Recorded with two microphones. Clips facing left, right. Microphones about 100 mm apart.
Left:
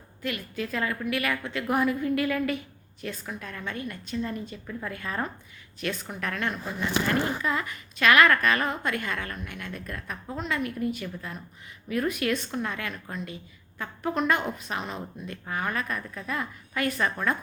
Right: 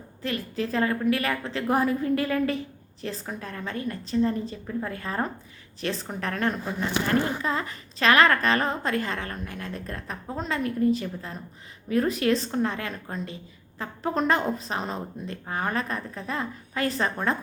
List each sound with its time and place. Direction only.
0.2 s speech: 35° right (ahead or behind)